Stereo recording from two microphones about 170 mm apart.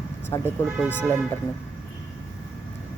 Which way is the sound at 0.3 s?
20° left (ahead or behind).